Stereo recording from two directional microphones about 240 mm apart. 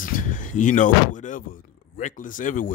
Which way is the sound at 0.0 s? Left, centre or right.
Left.